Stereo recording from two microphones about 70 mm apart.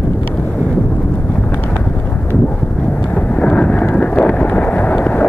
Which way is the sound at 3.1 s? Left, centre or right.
Centre.